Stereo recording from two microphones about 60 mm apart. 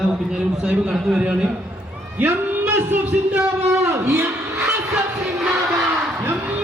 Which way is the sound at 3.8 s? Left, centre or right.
Right.